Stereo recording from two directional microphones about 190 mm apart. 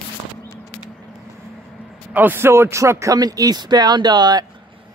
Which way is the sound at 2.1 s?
10° right (ahead or behind).